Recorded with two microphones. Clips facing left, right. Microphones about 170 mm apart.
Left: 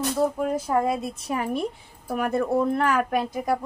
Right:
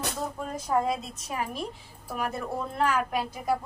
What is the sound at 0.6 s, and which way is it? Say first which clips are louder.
Speech: left 3 dB; 60° left (ahead or behind).